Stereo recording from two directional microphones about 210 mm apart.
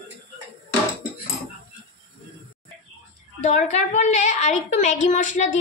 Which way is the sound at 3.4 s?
35° left (ahead or behind).